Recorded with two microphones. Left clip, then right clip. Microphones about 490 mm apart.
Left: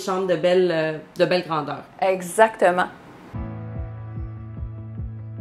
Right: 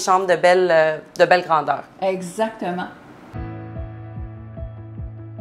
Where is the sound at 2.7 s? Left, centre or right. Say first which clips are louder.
Left 7 dB; left.